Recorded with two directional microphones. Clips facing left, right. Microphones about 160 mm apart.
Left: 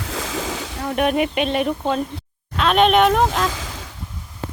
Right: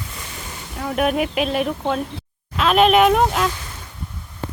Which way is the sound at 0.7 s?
Centre (ahead or behind).